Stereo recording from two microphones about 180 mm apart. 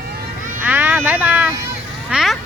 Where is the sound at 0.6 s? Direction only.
10° right (ahead or behind).